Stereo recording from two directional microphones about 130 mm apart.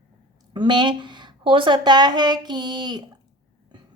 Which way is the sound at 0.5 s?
35° right (ahead or behind).